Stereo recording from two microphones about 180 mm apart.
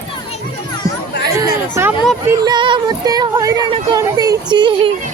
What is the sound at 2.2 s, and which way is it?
Music, 20° right (ahead or behind).